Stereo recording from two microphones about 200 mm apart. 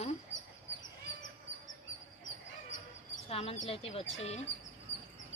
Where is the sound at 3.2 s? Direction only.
30° left (ahead or behind).